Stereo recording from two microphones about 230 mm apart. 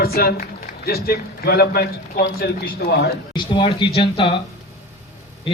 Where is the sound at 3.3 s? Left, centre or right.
Left.